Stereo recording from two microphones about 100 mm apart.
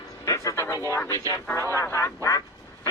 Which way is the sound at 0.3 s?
30° left (ahead or behind).